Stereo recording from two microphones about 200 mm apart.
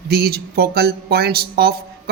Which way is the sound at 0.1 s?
50° right (ahead or behind).